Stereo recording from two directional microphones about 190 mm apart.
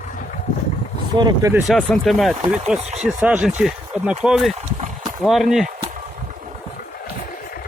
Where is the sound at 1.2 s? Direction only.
15° right (ahead or behind).